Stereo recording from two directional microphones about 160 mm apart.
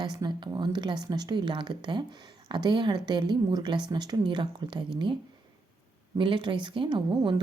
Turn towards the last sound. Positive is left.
turn(degrees=-30)  # may be behind; listen again after turning